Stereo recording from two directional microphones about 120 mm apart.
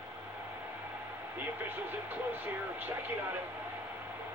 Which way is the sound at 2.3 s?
15° right (ahead or behind).